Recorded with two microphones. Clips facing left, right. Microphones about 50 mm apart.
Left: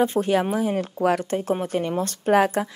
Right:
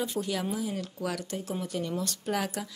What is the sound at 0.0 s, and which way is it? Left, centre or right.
A woman's voice, left.